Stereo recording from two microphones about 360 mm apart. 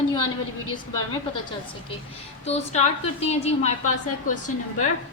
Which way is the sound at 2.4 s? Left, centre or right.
Centre.